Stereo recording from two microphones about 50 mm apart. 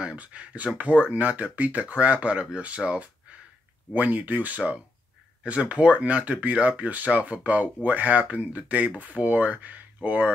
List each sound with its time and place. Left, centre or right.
0.0 s speech: right